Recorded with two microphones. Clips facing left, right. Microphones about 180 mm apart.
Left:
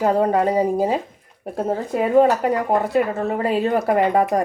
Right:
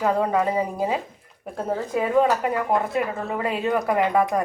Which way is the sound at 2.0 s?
40° left (ahead or behind).